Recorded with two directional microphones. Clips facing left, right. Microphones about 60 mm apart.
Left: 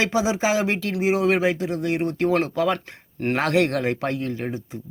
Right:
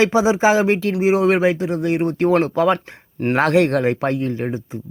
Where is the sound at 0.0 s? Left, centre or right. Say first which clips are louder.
Right 7 dB; right.